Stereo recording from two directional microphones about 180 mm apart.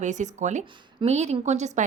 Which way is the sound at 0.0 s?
40° right (ahead or behind).